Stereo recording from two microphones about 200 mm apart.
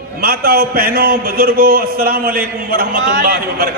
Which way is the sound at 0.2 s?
50° right (ahead or behind).